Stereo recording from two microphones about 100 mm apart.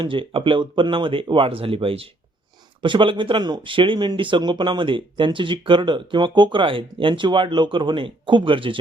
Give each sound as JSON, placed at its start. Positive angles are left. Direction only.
{"t": 0.0, "sound": "speech", "side_deg": -60}